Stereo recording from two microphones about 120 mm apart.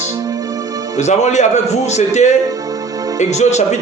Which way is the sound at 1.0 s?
75° left (ahead or behind).